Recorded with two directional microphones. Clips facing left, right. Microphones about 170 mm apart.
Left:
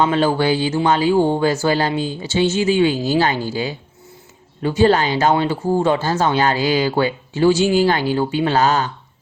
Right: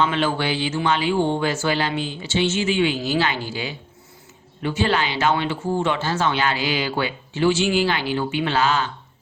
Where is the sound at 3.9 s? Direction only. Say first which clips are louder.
Left 4 dB; 25° left (ahead or behind).